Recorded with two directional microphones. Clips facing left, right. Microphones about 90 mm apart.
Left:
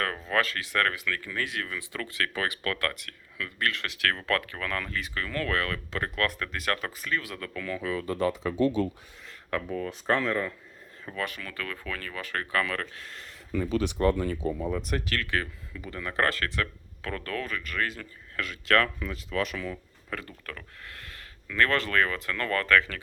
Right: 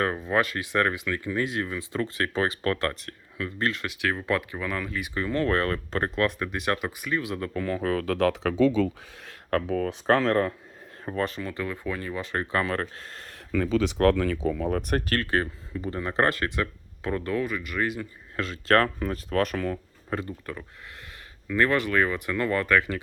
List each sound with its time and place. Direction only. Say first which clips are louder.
0.0 s speech: right 3 dB; 20° right (ahead or behind)
7.9 s speech: right 3 dB; 80° right
9.2 s speech: right 5 dB; 65° right (ahead or behind)
11.0 s speech: right 6 dB; 40° right (ahead or behind)
13.6 s speech: right 4 dB; 90° right
14.8 s speech: right 4 dB; 50° right (ahead or behind); by 18.4 s 15° right (ahead or behind)
18.4 s speech: right 3 dB; 35° right (ahead or behind); by 19.8 s 50° right (ahead or behind)
20.1 s speech: right 6 dB; 25° right (ahead or behind)